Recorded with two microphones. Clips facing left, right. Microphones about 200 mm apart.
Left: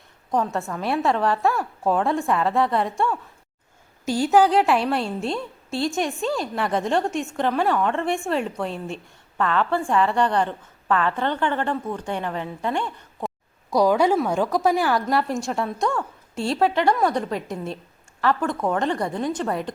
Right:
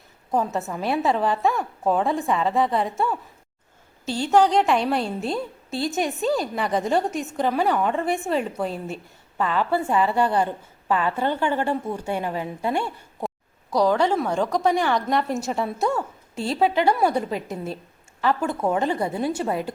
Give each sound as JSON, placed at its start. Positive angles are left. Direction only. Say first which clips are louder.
{"t": 0.3, "sound": "a woman's voice", "louder": "even", "side_deg": -5}
{"t": 4.0, "sound": "a woman's voice", "louder": "left 1 dB", "side_deg": 10}
{"t": 13.7, "sound": "a woman's voice", "louder": "left 2 dB", "side_deg": 10}